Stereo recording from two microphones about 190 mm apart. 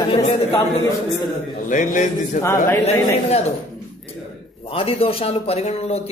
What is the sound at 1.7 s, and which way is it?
Speech, 40° left (ahead or behind).